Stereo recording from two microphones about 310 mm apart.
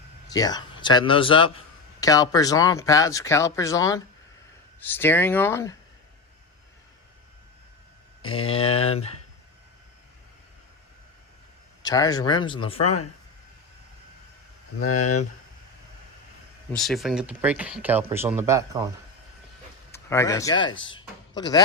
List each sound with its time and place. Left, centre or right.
0.3 s a man's voice: centre
8.2 s a man's voice: centre
11.8 s a man's voice: centre
12.8 s speech: left
14.8 s speech: left
16.7 s speech: centre
19.9 s speech: centre
20.9 s a sound: centre